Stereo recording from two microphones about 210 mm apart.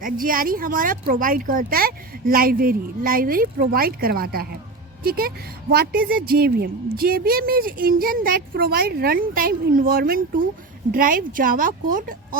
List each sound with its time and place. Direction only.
0.0 s a woman's voice: 40° right (ahead or behind)